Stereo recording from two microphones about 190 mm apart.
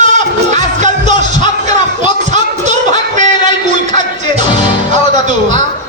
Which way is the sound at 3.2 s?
25° left (ahead or behind).